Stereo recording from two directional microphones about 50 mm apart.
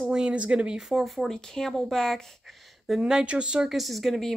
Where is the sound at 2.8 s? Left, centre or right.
Centre.